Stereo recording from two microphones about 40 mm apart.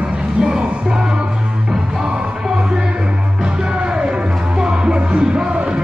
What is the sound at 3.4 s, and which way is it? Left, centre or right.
Music, right.